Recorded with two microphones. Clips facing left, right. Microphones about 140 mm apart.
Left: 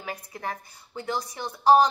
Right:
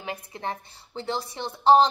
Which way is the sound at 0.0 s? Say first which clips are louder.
Right 1 dB; 25° right (ahead or behind).